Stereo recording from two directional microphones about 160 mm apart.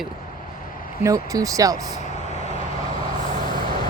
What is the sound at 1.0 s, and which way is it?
Speech, 20° right (ahead or behind).